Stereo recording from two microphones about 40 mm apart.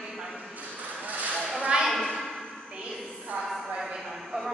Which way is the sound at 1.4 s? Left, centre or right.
Right.